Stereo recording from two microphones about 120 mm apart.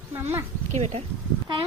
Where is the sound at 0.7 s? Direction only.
70° right (ahead or behind).